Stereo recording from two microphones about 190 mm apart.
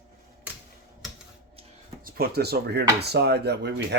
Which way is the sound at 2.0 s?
55° right (ahead or behind).